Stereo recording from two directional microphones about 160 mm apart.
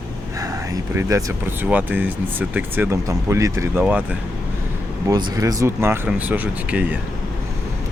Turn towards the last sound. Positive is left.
turn(degrees=-10)  # may be behind; listen again after turning